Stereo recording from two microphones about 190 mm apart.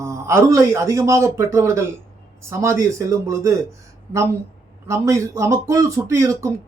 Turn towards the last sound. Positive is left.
turn(degrees=-15)  # may be behind; listen again after turning